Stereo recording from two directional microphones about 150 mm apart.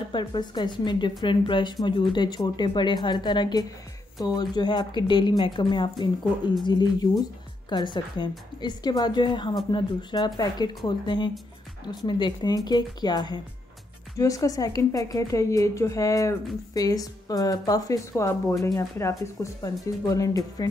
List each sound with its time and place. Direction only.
0.1 s a woman's voice: 30° left (ahead or behind)